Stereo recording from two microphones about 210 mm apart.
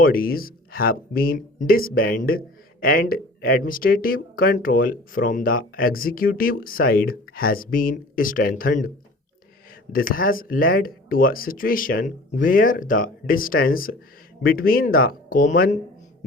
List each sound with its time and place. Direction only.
0.0 s speech: 45° left (ahead or behind)
9.9 s speech: 40° left (ahead or behind)